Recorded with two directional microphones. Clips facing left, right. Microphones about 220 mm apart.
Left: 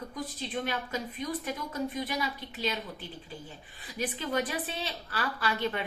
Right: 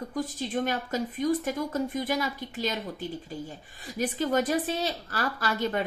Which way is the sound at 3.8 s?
45° right (ahead or behind).